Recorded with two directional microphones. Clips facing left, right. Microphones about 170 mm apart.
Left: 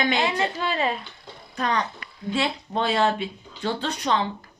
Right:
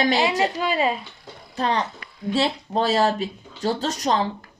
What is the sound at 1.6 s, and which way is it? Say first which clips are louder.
Speech: right 2 dB; 30° right (ahead or behind).